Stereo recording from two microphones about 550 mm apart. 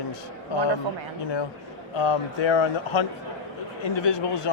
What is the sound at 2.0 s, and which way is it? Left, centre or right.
Speech, left.